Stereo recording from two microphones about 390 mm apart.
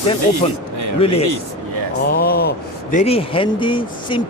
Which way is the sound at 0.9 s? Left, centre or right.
Centre.